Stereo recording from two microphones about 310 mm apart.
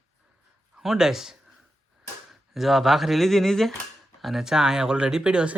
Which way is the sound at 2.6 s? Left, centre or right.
Centre.